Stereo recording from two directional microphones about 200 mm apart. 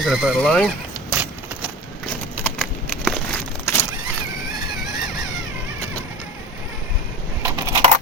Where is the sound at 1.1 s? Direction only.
5° right (ahead or behind).